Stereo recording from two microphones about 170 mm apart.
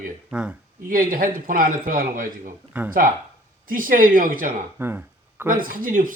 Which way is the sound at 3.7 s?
55° right (ahead or behind).